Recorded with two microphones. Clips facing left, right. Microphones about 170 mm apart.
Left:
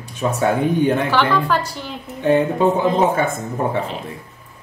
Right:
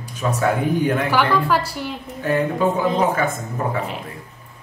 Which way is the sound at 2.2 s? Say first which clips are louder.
Left 4 dB; 25° left (ahead or behind).